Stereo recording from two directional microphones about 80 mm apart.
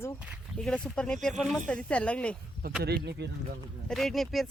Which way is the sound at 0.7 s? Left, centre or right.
Centre.